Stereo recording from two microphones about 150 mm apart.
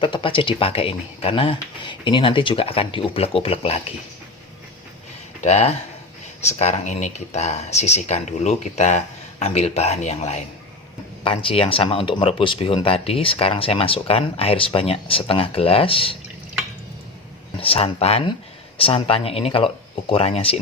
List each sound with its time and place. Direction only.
0.0 s speech: 35° left (ahead or behind)
5.4 s speech: 45° left (ahead or behind)
11.2 s speech: 35° left (ahead or behind)
17.6 s speech: 35° left (ahead or behind)